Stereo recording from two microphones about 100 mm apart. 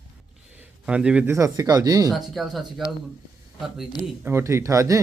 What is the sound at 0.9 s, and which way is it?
Speech, 10° right (ahead or behind).